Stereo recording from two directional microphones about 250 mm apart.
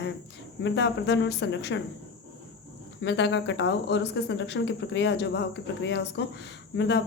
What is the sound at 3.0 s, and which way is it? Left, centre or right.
Speech, left.